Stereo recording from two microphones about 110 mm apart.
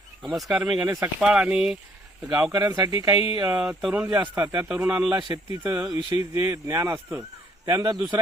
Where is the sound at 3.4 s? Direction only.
10° right (ahead or behind).